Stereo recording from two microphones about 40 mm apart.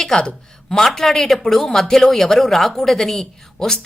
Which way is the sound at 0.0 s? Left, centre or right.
Centre.